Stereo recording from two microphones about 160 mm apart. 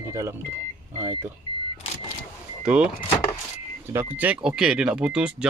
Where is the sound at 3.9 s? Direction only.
15° right (ahead or behind).